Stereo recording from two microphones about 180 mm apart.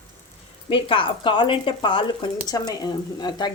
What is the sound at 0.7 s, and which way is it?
Speech, 30° left (ahead or behind).